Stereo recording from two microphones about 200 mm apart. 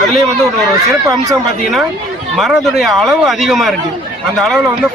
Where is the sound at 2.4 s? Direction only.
Centre (ahead or behind).